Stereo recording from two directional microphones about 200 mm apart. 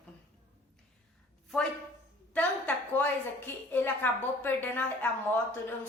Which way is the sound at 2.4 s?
5° left (ahead or behind).